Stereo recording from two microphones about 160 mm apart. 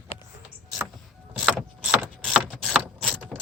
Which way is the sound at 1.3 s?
Centre (ahead or behind).